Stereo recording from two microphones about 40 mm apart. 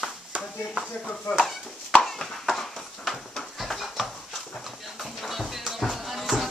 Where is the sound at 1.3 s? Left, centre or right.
Centre.